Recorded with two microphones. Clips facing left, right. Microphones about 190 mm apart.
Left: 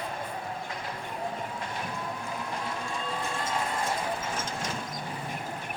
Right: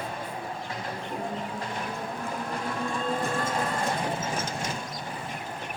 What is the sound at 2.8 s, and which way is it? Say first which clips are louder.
Music: right 5 dB; 50° right (ahead or behind).